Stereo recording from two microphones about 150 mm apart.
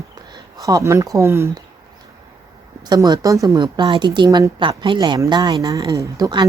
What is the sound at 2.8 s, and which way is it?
A woman's voice, 25° right (ahead or behind).